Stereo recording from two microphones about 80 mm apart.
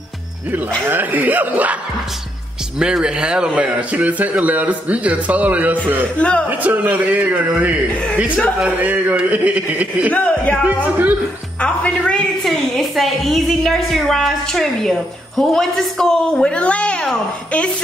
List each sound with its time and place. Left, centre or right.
0.8 s a man's voice: right
2.8 s speech: centre
6.1 s speech: centre
6.6 s a man's voice: right
7.9 s speech: centre
8.8 s a man's voice: centre
10.1 s speech: centre
11.6 s speech: centre
12.4 s a woman's voice: centre